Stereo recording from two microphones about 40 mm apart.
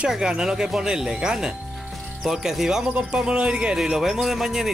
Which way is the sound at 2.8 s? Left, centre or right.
Right.